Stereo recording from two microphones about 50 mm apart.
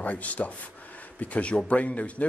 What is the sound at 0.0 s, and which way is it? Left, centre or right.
Speech, left.